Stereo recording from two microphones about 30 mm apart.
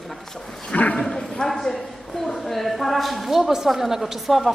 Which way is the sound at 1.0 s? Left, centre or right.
Centre.